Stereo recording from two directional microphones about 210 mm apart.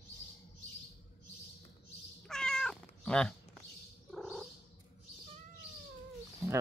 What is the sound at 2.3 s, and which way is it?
Cat, 5° left (ahead or behind).